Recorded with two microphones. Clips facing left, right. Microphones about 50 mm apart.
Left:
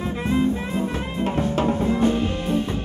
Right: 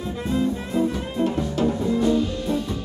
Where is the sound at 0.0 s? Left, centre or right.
Left.